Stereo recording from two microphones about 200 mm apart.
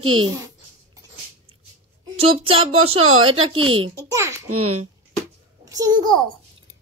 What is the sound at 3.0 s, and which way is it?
Speech, 90° right.